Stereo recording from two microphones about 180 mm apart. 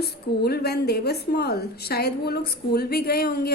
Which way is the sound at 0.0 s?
60° left (ahead or behind).